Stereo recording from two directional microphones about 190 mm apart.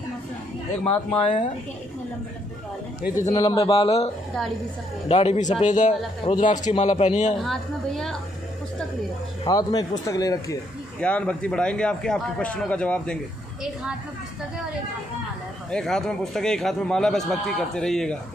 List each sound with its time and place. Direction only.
1.1 s speech: 30° left (ahead or behind)
3.2 s a man's voice: 20° left (ahead or behind); by 7.3 s 35° left (ahead or behind)
7.3 s a man's voice: centre (ahead or behind)
9.4 s speech: 20° left (ahead or behind)
11.0 s a man's voice: 5° left (ahead or behind)
15.7 s a man's voice: 5° left (ahead or behind)